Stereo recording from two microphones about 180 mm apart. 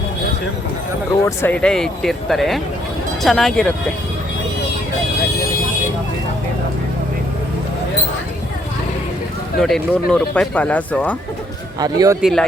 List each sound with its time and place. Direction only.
1.2 s speech: 10° left (ahead or behind)
9.6 s speech: 5° left (ahead or behind)
11.8 s a man's voice: 20° right (ahead or behind)
12.2 s speech: 5° left (ahead or behind)